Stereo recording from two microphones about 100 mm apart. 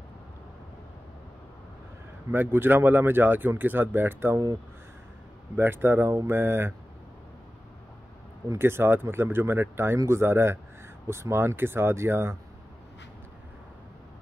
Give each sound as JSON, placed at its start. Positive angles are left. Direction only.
{"t": 2.3, "sound": "speech", "side_deg": -20}
{"t": 5.6, "sound": "speech", "side_deg": -25}
{"t": 8.5, "sound": "speech", "side_deg": -25}